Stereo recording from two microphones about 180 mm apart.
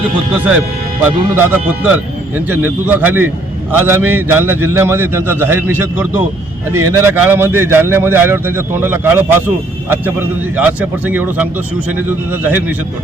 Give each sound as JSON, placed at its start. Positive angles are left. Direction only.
{"t": 1.0, "sound": "a man's voice", "side_deg": -10}